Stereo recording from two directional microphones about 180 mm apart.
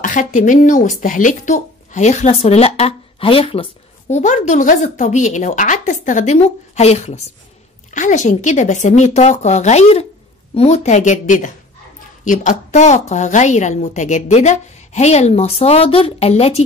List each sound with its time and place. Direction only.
0.0 s speech: 45° left (ahead or behind)
4.1 s a woman's voice: 40° left (ahead or behind)